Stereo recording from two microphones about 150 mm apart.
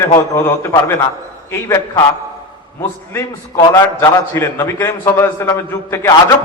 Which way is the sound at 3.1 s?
20° left (ahead or behind).